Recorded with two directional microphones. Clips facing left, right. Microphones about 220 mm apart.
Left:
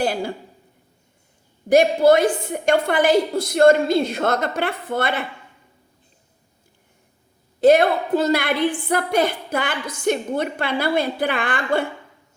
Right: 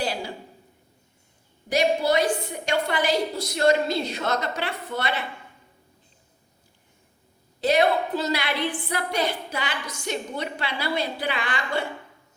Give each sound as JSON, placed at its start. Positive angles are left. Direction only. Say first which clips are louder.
{"t": 0.0, "sound": "a sound", "louder": "left 6 dB", "side_deg": 50}
{"t": 1.7, "sound": "a woman's voice", "louder": "left 8 dB", "side_deg": 50}
{"t": 7.6, "sound": "a woman's voice", "louder": "left 6 dB", "side_deg": 50}